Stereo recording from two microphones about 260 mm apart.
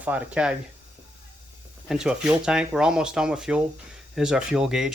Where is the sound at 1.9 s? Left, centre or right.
Centre.